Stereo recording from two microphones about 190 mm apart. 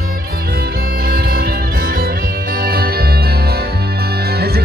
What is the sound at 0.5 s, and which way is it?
Music, 55° right (ahead or behind).